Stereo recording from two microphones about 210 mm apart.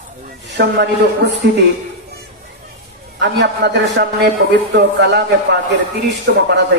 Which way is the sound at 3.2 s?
55° right (ahead or behind).